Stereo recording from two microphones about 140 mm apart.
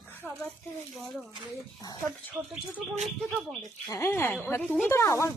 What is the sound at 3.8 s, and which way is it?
Speech, 20° left (ahead or behind).